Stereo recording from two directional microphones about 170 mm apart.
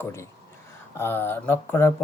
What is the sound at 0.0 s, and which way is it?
Speech, 15° left (ahead or behind).